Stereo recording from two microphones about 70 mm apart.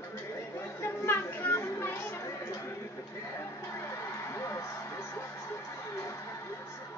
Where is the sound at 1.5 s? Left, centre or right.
Left.